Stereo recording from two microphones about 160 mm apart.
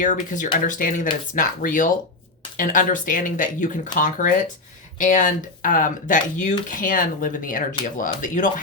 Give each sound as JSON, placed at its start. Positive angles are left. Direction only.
{"t": 0.0, "sound": "speech", "side_deg": 55}